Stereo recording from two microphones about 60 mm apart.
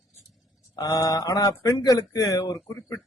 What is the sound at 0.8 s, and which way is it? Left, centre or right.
A man's voice, left.